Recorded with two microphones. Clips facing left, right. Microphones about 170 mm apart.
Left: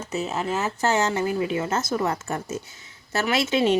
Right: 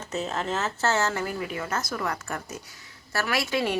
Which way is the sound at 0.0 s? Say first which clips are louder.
Left 3 dB; 10° left (ahead or behind).